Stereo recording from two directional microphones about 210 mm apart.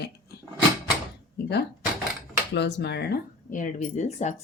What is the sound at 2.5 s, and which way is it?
Speech, 55° left (ahead or behind).